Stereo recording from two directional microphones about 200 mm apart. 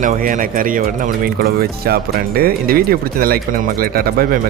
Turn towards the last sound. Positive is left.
turn(degrees=-50)  # may be behind; listen again after turning